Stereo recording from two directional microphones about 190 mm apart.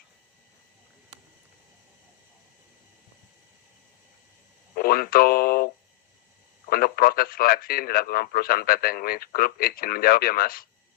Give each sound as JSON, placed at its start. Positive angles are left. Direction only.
{"t": 4.7, "sound": "speech", "side_deg": 50}